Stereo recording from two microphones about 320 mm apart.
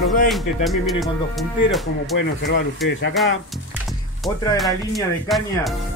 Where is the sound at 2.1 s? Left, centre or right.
Left.